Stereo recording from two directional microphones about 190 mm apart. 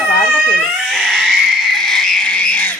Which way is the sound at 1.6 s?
Centre (ahead or behind).